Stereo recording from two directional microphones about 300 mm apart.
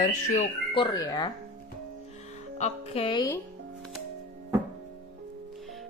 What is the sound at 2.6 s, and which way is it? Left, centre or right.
Speech, centre.